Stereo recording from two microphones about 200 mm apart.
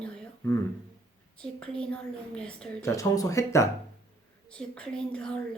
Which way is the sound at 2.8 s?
15° left (ahead or behind).